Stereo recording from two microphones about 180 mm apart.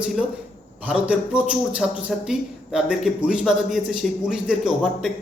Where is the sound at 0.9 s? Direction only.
5° right (ahead or behind).